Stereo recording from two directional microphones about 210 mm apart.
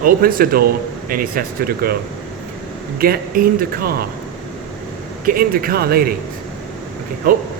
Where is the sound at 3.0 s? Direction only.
45° right (ahead or behind).